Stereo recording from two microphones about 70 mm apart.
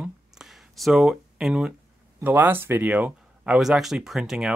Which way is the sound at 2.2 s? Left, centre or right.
Right.